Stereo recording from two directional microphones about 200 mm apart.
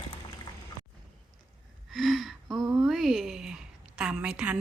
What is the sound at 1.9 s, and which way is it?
Gasp, centre (ahead or behind).